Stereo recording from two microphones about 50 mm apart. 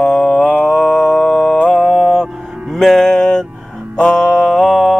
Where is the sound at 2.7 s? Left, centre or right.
Centre.